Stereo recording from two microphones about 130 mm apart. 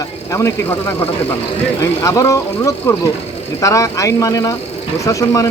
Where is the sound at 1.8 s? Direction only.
25° left (ahead or behind).